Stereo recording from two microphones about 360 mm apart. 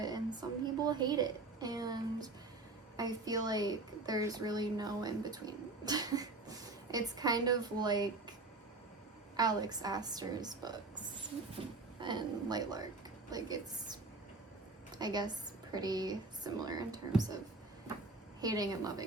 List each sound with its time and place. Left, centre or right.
0.0 s a woman's voice: centre
18.3 s a woman's voice: centre